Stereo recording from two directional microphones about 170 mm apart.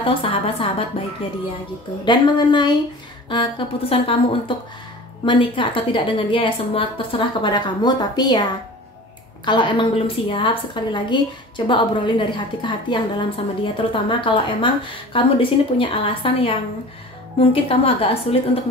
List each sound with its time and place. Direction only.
0.0 s a woman's voice: 30° left (ahead or behind)
2.0 s a woman's voice: 25° left (ahead or behind)